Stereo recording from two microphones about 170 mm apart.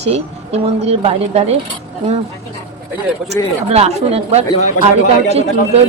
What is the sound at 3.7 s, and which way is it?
A woman's voice, 35° right (ahead or behind).